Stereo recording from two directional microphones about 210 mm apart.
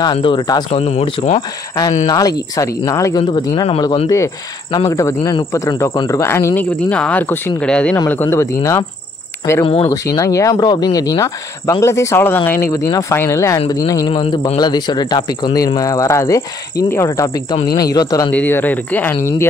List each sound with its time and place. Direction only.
0.0 s speech: 25° left (ahead or behind)
0.7 s speech: 30° left (ahead or behind)
2.0 s speech: 20° left (ahead or behind)